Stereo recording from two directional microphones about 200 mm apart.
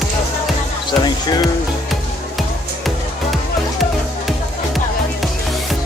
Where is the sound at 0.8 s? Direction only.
20° left (ahead or behind).